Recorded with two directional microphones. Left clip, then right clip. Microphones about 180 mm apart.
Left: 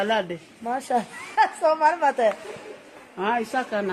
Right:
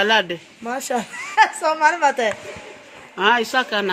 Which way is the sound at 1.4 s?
45° right (ahead or behind).